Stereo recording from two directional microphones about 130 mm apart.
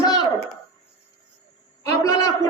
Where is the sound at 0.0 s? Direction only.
30° left (ahead or behind).